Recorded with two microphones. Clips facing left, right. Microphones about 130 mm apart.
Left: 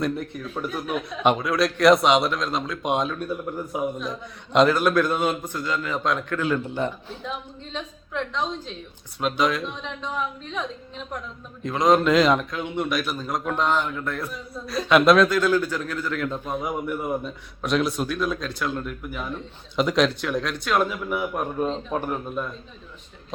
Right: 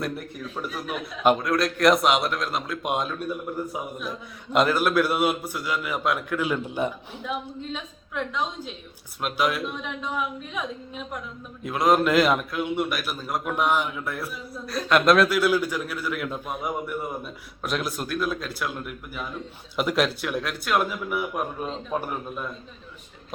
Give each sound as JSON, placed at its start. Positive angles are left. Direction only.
{"t": 0.0, "sound": "a man's voice", "side_deg": 0}